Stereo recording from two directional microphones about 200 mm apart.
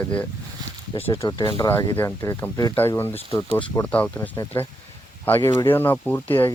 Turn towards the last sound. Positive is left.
turn(degrees=10)  # may be behind; listen again after turning